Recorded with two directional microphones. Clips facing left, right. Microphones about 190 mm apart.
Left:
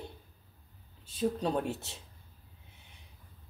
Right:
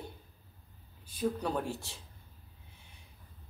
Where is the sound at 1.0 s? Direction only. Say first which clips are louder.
Left 2 dB; 25° left (ahead or behind).